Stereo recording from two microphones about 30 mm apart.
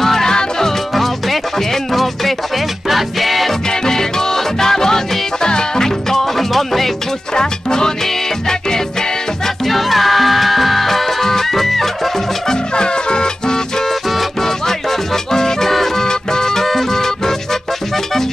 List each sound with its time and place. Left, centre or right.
0.0 s music: centre
0.9 s music: centre
3.8 s music: centre
5.9 s music: centre
7.3 s music: left
9.7 s music: centre
12.4 s music: left
14.4 s music: centre
16.1 s music: left